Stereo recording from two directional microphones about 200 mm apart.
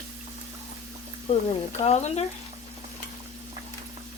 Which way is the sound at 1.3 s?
30° left (ahead or behind).